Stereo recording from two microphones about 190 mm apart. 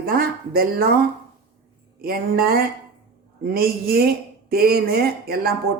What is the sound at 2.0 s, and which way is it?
Speech, 50° right (ahead or behind).